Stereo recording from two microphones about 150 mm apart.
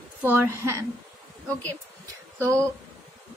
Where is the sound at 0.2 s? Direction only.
15° right (ahead or behind).